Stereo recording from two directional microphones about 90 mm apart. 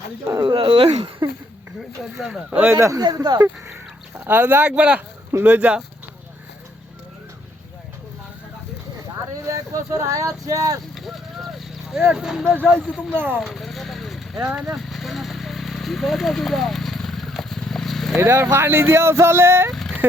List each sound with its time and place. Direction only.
0.4 s speech: 60° right (ahead or behind)
2.1 s speech: 5° right (ahead or behind)
2.5 s speech: 20° right (ahead or behind)
2.7 s speech: 35° right (ahead or behind)
3.0 s speech: 50° right (ahead or behind)
4.2 s speech: 20° right (ahead or behind)
9.3 s speech: 35° right (ahead or behind)
10.9 s clip-clop: centre (ahead or behind)
12.1 s speech: 5° right (ahead or behind)
13.1 s speech: 20° right (ahead or behind)
13.4 s vehicle: centre (ahead or behind)
14.8 s a sound: centre (ahead or behind)
18.2 s speech: 30° right (ahead or behind)
19.7 s a sound: 5° left (ahead or behind)